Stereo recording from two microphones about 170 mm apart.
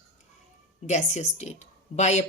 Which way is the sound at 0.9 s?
45° left (ahead or behind).